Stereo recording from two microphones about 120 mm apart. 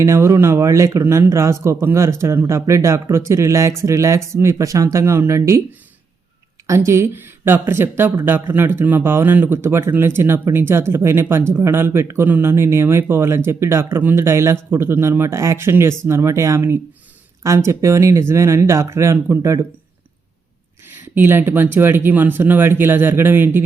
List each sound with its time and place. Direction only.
0.0 s speech: 25° right (ahead or behind)
6.7 s speech: 25° right (ahead or behind)
21.2 s speech: 20° right (ahead or behind)